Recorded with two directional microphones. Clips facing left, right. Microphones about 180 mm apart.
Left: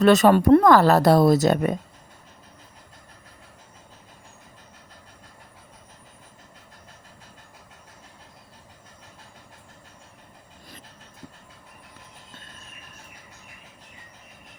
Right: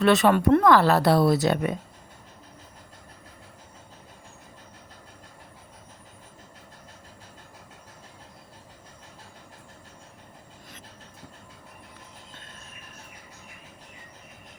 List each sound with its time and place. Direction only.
0.0 s speech: 40° left (ahead or behind)